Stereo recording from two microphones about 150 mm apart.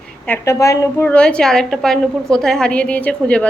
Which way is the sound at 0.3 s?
20° left (ahead or behind).